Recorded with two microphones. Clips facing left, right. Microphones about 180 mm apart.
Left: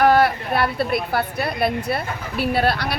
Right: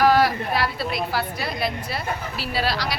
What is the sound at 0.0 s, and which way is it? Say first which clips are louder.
A woman's voice: left 2 dB; 55° left (ahead or behind).